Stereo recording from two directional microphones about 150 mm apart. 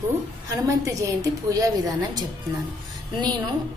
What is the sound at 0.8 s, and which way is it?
A woman's voice, 20° right (ahead or behind).